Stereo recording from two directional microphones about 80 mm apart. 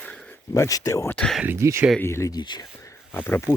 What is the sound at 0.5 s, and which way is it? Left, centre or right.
Speech, left.